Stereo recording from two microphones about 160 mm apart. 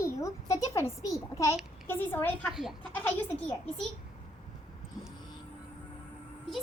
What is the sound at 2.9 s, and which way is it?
Speech, 10° left (ahead or behind).